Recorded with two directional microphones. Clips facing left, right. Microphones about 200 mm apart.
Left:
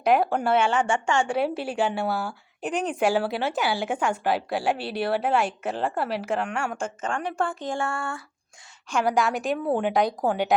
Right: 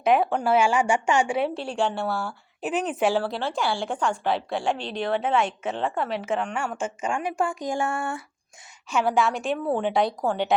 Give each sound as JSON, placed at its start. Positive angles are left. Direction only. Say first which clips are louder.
{"t": 0.0, "sound": "speech", "louder": "even", "side_deg": 0}
{"t": 1.4, "sound": "a woman's voice", "louder": "even", "side_deg": 5}
{"t": 8.9, "sound": "a woman's voice", "louder": "even", "side_deg": -5}